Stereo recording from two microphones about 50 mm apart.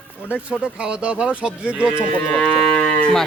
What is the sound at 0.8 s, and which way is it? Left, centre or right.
Speech, centre.